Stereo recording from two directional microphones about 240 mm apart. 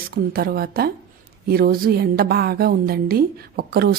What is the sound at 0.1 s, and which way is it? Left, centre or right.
Speech, right.